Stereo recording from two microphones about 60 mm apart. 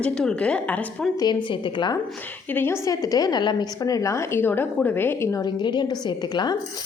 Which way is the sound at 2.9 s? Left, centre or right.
Left.